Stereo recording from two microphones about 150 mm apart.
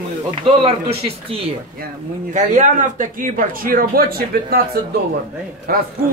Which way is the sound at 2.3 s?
55° right (ahead or behind).